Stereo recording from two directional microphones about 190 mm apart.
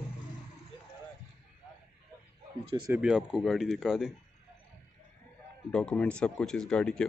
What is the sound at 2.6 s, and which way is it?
Speech, 25° right (ahead or behind).